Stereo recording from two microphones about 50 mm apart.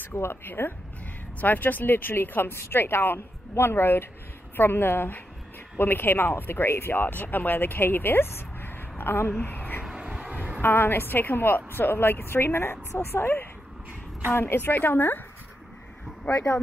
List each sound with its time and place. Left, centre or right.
0.0 s speech: left
2.5 s speech: left
9.4 s a sound: left
9.8 s vehicle: centre
10.2 s a sound: right
10.6 s speech: left
14.7 s speech: left